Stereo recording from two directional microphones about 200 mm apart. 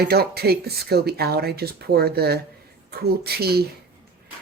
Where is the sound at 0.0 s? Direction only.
50° right (ahead or behind).